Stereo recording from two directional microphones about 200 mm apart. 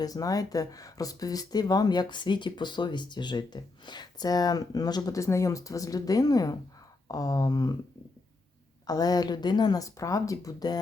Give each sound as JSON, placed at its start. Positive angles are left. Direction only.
{"t": 0.0, "sound": "speech", "side_deg": 20}
{"t": 8.9, "sound": "speech", "side_deg": 20}